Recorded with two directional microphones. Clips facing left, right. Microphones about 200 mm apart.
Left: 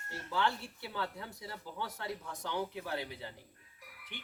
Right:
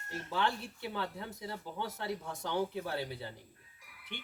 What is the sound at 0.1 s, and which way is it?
Speech, 20° right (ahead or behind).